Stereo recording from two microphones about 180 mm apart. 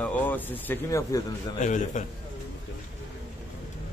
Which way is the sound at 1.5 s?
45° left (ahead or behind).